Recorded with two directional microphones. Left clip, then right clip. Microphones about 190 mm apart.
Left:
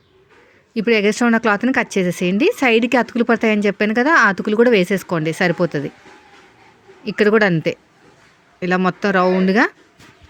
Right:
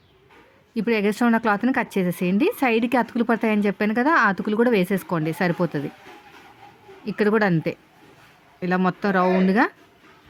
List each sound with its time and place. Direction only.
0.7 s speech: 25° left (ahead or behind)
7.0 s speech: 30° left (ahead or behind)